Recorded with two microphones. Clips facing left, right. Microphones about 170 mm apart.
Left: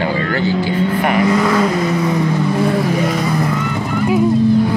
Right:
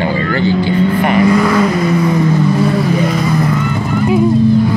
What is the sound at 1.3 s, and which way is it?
Vehicle, 20° left (ahead or behind).